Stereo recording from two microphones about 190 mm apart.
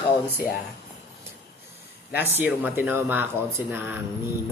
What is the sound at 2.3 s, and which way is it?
Speech, 10° right (ahead or behind).